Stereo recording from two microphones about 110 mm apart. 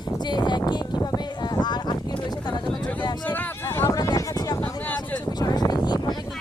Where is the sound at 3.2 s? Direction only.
15° left (ahead or behind); by 4.6 s 35° left (ahead or behind).